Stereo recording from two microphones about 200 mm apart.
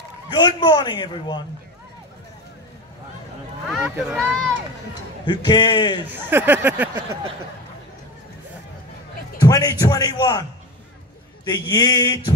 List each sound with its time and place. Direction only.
0.3 s a man's voice: 20° left (ahead or behind)
3.6 s speech: 5° right (ahead or behind)
5.2 s a man's voice: 20° left (ahead or behind)
6.1 s speech: 10° right (ahead or behind)
9.4 s a man's voice: 20° left (ahead or behind)
11.4 s a man's voice: 20° left (ahead or behind)